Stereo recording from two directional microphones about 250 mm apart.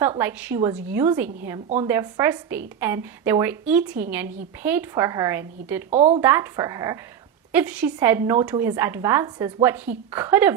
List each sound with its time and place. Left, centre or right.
0.2 s a woman's voice: centre
5.9 s speech: right
6.1 s a woman's voice: centre